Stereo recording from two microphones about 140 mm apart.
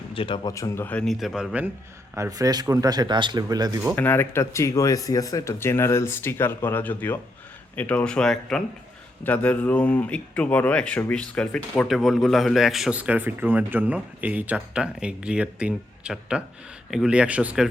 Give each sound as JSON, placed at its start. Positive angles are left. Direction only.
{"t": 0.1, "sound": "speech", "side_deg": 40}
{"t": 0.4, "sound": "speech", "side_deg": 25}
{"t": 0.9, "sound": "a man's voice", "side_deg": 5}
{"t": 2.1, "sound": "speech", "side_deg": -25}
{"t": 3.9, "sound": "a man's voice", "side_deg": 15}